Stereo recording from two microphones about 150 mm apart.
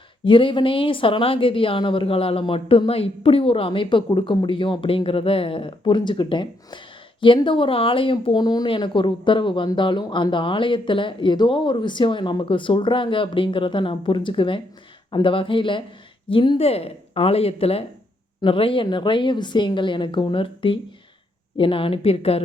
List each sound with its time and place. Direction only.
0.3 s a woman's voice: 35° left (ahead or behind)